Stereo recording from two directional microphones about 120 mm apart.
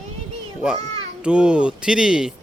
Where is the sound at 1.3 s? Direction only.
10° right (ahead or behind).